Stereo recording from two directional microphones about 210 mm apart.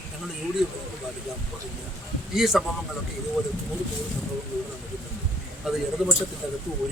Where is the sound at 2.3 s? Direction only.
Centre (ahead or behind).